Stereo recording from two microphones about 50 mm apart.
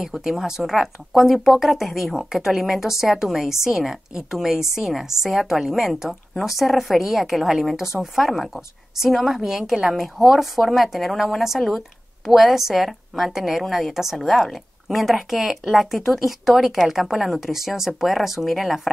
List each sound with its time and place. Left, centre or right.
0.0 s a woman's voice: centre